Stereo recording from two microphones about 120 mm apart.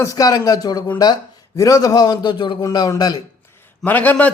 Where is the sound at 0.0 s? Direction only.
30° left (ahead or behind).